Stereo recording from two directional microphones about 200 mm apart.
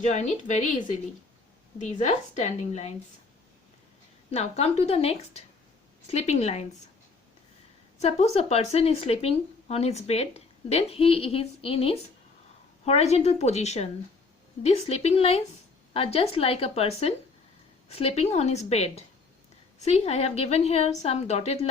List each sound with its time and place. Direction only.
0.0 s speech: 35° left (ahead or behind)
4.3 s speech: 30° left (ahead or behind)
7.9 s speech: 30° left (ahead or behind)